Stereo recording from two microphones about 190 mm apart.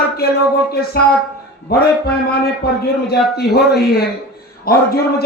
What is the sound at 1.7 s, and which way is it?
A man's voice, 55° left (ahead or behind).